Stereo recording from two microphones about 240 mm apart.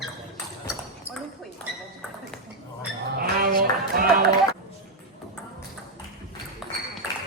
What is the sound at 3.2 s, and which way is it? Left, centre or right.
Music, right.